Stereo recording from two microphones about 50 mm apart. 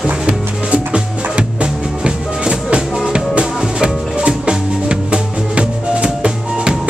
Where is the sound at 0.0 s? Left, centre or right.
Right.